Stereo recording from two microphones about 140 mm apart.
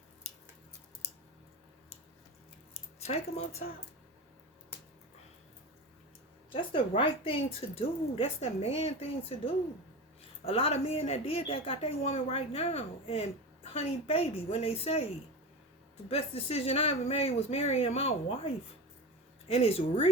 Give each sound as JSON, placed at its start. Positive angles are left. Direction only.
{"t": 3.0, "sound": "a woman's voice", "side_deg": 50}
{"t": 6.5, "sound": "a woman's voice", "side_deg": 35}
{"t": 16.0, "sound": "a woman's voice", "side_deg": 45}